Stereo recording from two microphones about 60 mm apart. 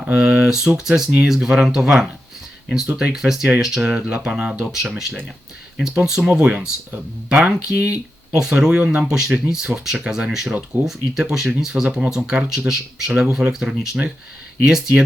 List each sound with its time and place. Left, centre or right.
0.0 s speech: centre
4.7 s speech: centre